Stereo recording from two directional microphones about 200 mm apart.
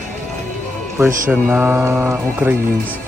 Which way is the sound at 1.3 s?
10° right (ahead or behind).